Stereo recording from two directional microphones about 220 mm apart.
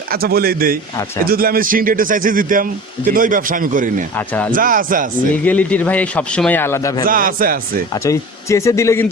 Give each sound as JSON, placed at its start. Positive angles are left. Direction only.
{"t": 0.1, "sound": "a man's voice", "side_deg": -45}
{"t": 5.3, "sound": "a man's voice", "side_deg": 5}
{"t": 7.0, "sound": "a man's voice", "side_deg": -40}
{"t": 8.0, "sound": "a man's voice", "side_deg": 15}